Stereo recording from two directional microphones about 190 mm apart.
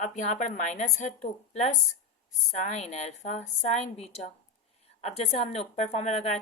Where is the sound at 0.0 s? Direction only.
40° left (ahead or behind).